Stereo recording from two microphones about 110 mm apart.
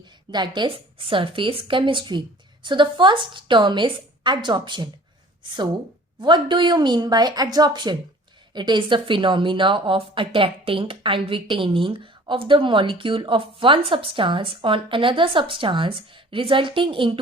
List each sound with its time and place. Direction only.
0.3 s speech: 40° right (ahead or behind)
6.1 s speech: 45° right (ahead or behind)